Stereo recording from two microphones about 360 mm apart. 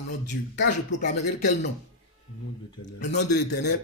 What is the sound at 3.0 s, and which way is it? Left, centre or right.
Speech, left.